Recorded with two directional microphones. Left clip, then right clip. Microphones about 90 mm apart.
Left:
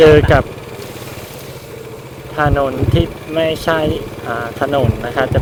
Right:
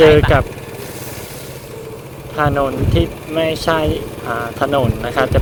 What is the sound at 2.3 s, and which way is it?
Speech, 5° right (ahead or behind).